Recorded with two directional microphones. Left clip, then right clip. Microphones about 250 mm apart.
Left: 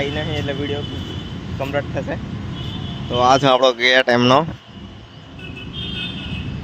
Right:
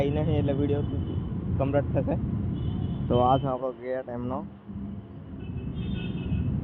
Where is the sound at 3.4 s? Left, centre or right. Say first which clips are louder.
Left 17 dB; left.